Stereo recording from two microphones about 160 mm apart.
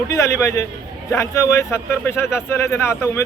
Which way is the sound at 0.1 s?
20° left (ahead or behind).